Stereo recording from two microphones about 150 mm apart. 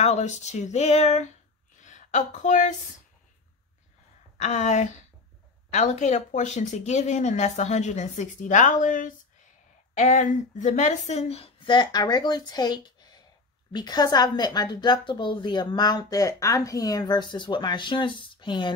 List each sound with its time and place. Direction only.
0.0 s a woman's voice: 45° left (ahead or behind)
1.8 s a sound: 55° left (ahead or behind)
4.4 s a woman's voice: 50° left (ahead or behind); by 18.7 s 30° left (ahead or behind)